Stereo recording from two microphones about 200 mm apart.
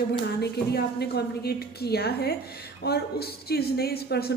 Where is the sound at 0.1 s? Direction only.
55° left (ahead or behind).